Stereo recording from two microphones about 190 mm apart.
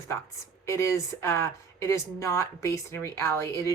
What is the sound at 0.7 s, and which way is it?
Speech, 15° left (ahead or behind).